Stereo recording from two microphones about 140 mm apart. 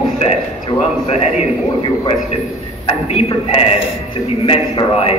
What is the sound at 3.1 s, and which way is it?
A man's voice, 45° left (ahead or behind).